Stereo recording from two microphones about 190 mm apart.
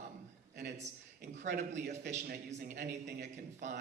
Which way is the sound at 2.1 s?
40° right (ahead or behind).